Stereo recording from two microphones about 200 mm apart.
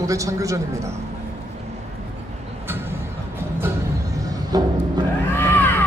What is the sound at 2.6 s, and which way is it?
Music, 10° right (ahead or behind).